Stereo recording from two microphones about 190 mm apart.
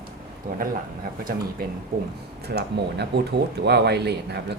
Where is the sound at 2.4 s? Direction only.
60° right (ahead or behind).